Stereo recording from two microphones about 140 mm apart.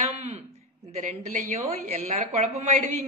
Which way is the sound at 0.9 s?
65° right (ahead or behind).